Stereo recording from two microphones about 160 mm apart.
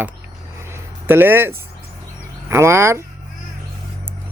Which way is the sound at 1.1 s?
15° right (ahead or behind).